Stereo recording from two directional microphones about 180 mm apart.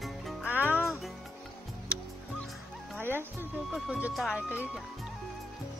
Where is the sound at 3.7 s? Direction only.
5° right (ahead or behind).